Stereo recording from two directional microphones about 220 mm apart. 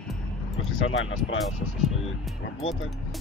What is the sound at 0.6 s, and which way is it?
Speech, 70° left (ahead or behind).